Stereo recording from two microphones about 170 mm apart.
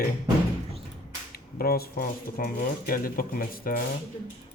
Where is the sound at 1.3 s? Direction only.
65° left (ahead or behind).